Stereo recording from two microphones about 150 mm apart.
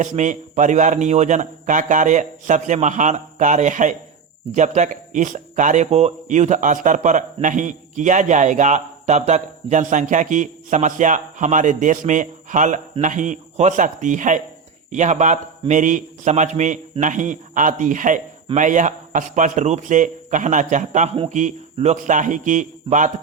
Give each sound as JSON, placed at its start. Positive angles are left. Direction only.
{"t": 0.0, "sound": "a man's voice", "side_deg": -55}